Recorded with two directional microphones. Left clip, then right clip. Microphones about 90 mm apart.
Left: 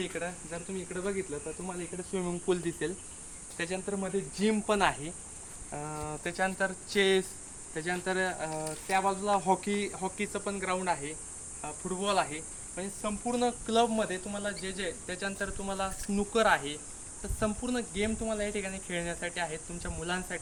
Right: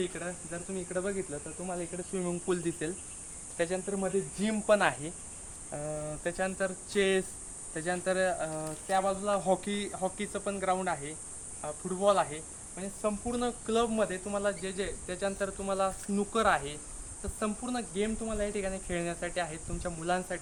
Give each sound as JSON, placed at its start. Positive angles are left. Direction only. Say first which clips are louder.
{"t": 0.0, "sound": "speech", "louder": "even", "side_deg": -15}
{"t": 0.7, "sound": "speech", "louder": "right 2 dB", "side_deg": -30}
{"t": 2.5, "sound": "speech", "louder": "left 3 dB", "side_deg": -45}
{"t": 3.6, "sound": "cricket", "louder": "right 3 dB", "side_deg": -30}
{"t": 5.7, "sound": "speech", "louder": "right 1 dB", "side_deg": -15}
{"t": 6.8, "sound": "speech", "louder": "left 2 dB", "side_deg": -30}
{"t": 8.4, "sound": "speech", "louder": "left 1 dB", "side_deg": 0}
{"t": 9.0, "sound": "speech", "louder": "left 1 dB", "side_deg": -25}
{"t": 12.7, "sound": "cricket", "louder": "right 3 dB", "side_deg": -25}